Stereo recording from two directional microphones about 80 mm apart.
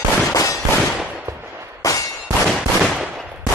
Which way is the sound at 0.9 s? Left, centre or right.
Centre.